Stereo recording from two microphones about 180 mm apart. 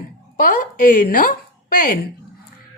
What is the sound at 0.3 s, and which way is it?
A woman's voice, 50° left (ahead or behind).